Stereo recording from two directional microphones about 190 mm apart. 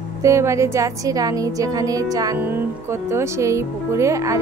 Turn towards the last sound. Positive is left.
turn(degrees=-15)  # may be behind; listen again after turning